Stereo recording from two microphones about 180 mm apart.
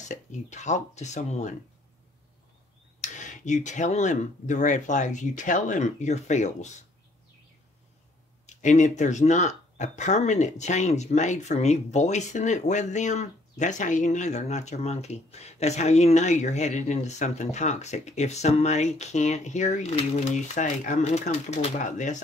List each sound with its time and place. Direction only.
0.1 s speech: 40° left (ahead or behind)
3.0 s speech: 40° left (ahead or behind)
8.5 s speech: 40° left (ahead or behind)